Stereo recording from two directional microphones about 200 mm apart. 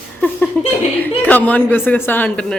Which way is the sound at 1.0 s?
10° left (ahead or behind).